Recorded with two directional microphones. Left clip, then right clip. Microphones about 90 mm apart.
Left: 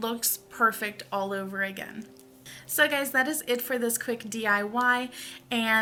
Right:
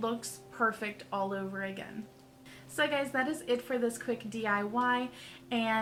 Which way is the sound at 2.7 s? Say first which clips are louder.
Left 6 dB; 25° left (ahead or behind).